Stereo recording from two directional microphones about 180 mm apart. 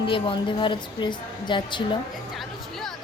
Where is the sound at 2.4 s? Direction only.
Centre (ahead or behind).